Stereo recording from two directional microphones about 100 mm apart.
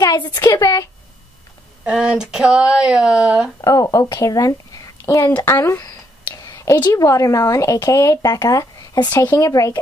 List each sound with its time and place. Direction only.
0.0 s a woman's voice: 45° left (ahead or behind)
1.9 s speech: 5° right (ahead or behind)
3.6 s a woman's voice: 35° left (ahead or behind)
6.3 s a sound: 35° left (ahead or behind)
6.9 s speech: 35° left (ahead or behind)